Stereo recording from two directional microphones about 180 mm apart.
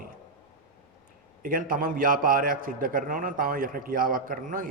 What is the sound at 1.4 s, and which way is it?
A man's voice, 50° right (ahead or behind).